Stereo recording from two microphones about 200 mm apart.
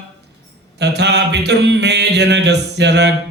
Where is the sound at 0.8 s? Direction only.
55° right (ahead or behind).